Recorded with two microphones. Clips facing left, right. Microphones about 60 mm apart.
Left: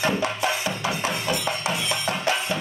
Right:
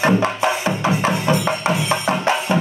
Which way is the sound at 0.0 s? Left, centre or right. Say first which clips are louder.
Right 7 dB; right.